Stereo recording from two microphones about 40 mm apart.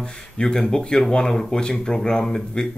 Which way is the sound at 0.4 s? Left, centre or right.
Left.